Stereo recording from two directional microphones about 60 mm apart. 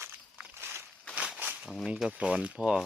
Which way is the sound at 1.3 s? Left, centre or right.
Right.